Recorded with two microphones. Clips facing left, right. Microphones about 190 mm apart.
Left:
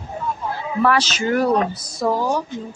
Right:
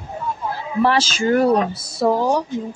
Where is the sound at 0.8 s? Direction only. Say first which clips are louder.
Right 1 dB; 30° right (ahead or behind).